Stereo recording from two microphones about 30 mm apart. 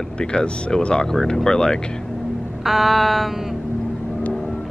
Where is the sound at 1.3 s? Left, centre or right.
Left.